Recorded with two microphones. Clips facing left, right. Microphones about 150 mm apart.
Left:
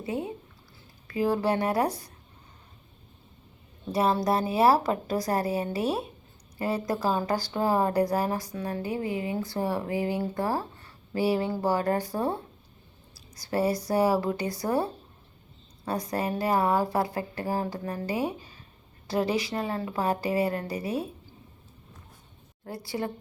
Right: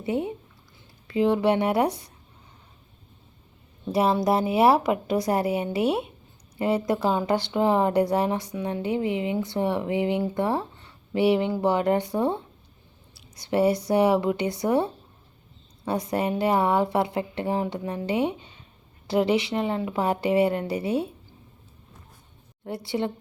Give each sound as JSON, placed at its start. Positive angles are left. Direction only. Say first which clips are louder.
{"t": 0.0, "sound": "speech", "louder": "right 5 dB", "side_deg": -25}
{"t": 3.9, "sound": "speech", "louder": "right 3 dB", "side_deg": -25}
{"t": 15.9, "sound": "speech", "louder": "right 4 dB", "side_deg": -25}
{"t": 22.6, "sound": "speech", "louder": "right 5 dB", "side_deg": -25}